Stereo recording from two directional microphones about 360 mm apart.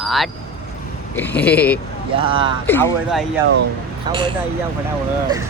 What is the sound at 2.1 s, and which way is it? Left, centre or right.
Speech, centre.